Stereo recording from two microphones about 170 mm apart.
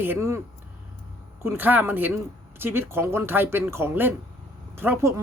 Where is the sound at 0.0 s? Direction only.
15° right (ahead or behind).